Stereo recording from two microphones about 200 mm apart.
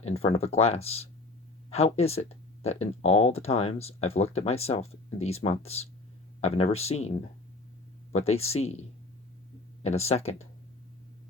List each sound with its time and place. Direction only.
0.0 s speech: 30° left (ahead or behind)
9.8 s speech: 30° left (ahead or behind)